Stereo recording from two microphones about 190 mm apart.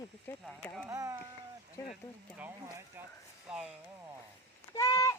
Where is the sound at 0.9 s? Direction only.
20° right (ahead or behind).